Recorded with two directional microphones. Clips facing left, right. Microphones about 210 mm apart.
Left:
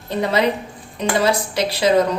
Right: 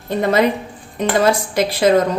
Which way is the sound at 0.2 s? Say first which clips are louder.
Right 3 dB; 50° right (ahead or behind).